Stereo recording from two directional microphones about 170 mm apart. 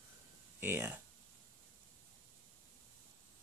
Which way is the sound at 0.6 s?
15° right (ahead or behind).